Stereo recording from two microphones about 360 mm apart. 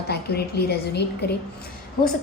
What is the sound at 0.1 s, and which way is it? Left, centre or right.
A woman's voice, left.